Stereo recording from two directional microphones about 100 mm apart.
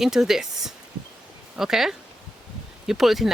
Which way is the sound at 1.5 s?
5° right (ahead or behind).